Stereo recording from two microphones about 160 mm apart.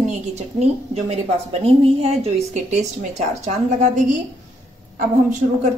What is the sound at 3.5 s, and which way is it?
Speech, 50° right (ahead or behind).